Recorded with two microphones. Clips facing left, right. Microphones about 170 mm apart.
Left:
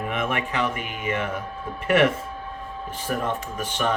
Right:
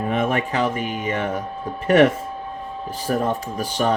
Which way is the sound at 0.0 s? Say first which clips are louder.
Right 5 dB; 35° right (ahead or behind).